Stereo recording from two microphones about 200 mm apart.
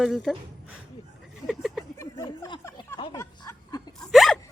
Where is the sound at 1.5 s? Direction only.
Centre (ahead or behind).